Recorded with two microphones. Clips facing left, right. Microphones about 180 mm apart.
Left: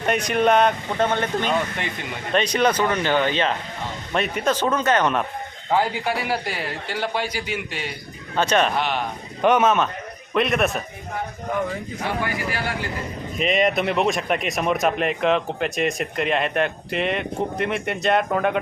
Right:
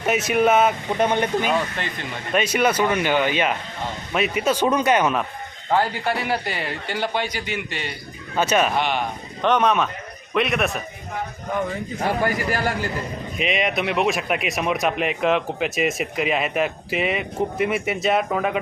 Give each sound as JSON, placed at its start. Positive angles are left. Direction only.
{"t": 0.0, "sound": "speech", "side_deg": -5}
{"t": 0.9, "sound": "speech", "side_deg": -15}
{"t": 5.7, "sound": "speech", "side_deg": 10}
{"t": 8.4, "sound": "speech", "side_deg": -5}
{"t": 12.0, "sound": "speech", "side_deg": -45}
{"t": 13.4, "sound": "speech", "side_deg": 0}